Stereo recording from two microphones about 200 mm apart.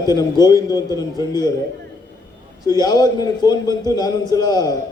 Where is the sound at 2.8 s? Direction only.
20° left (ahead or behind).